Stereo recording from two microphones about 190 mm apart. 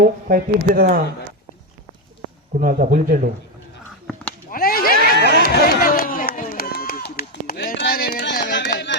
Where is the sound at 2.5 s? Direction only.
45° right (ahead or behind).